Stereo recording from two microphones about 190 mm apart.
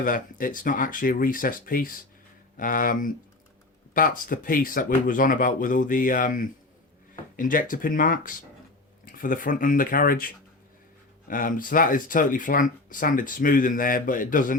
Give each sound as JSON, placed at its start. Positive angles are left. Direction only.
{"t": 0.0, "sound": "speech", "side_deg": 45}